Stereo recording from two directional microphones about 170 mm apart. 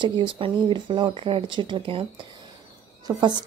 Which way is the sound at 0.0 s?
30° right (ahead or behind).